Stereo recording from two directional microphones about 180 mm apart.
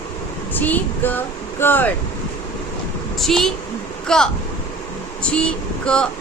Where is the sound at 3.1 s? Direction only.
Centre (ahead or behind).